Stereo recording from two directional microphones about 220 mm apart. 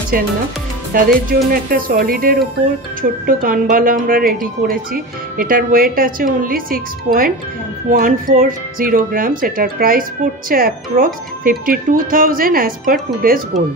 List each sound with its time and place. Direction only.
0.9 s a woman's voice: 40° right (ahead or behind)